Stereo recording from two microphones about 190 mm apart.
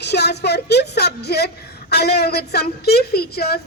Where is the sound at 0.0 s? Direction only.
60° left (ahead or behind).